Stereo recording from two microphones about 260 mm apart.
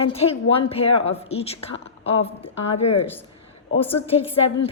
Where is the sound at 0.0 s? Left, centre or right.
Left.